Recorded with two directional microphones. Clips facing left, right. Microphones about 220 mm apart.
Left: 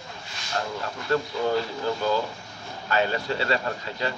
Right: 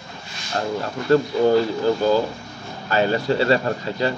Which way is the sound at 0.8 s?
35° right (ahead or behind).